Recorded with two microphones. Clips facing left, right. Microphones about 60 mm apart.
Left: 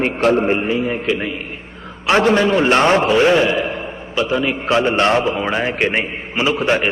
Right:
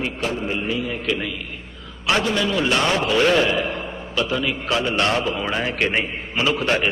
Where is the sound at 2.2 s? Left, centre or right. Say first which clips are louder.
Left 10 dB; left.